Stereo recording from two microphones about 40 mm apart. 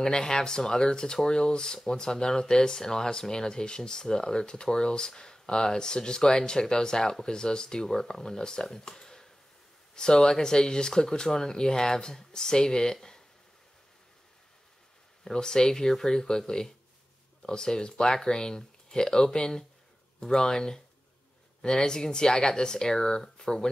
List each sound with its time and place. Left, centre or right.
0.0 s speech: centre
8.6 s a sound: centre
9.9 s speech: centre
15.2 s speech: centre